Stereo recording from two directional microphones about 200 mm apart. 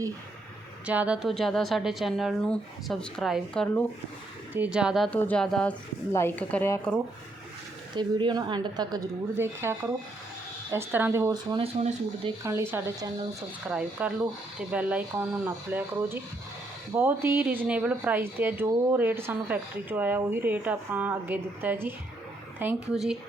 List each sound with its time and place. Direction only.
0.9 s speech: 5° right (ahead or behind)
4.5 s speech: 5° right (ahead or behind)
7.9 s a woman's voice: 20° right (ahead or behind)
12.4 s speech: 15° right (ahead or behind)